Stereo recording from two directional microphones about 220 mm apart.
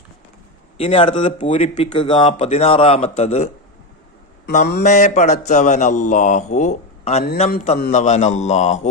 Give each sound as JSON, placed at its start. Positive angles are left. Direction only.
{"t": 0.8, "sound": "speech", "side_deg": 25}
{"t": 4.5, "sound": "mantra", "side_deg": 45}
{"t": 4.8, "sound": "speech", "side_deg": 35}